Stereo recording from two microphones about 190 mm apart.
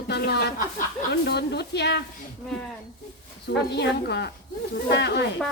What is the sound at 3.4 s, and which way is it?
Speech, 60° left (ahead or behind).